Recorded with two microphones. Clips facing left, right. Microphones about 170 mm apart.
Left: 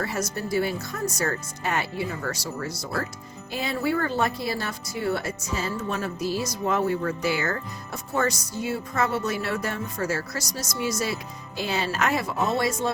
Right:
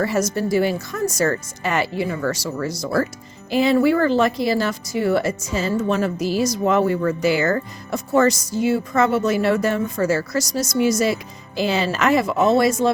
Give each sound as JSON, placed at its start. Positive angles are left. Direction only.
{"t": 0.0, "sound": "speech", "side_deg": -90}